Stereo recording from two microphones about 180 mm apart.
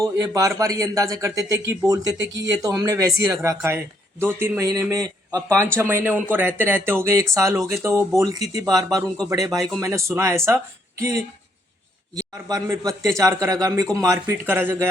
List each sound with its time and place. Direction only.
0.0 s a man's voice: 20° right (ahead or behind)